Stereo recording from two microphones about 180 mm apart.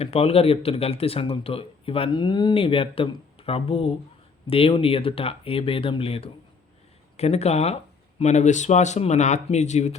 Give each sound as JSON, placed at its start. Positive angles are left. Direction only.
{"t": 0.0, "sound": "speech", "side_deg": 35}